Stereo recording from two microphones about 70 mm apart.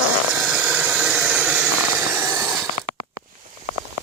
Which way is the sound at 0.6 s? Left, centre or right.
Centre.